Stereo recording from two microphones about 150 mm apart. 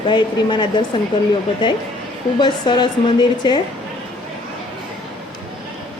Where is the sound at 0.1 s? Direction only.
30° left (ahead or behind).